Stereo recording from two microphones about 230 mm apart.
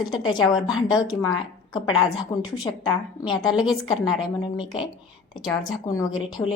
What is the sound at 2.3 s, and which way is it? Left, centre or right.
Speech, centre.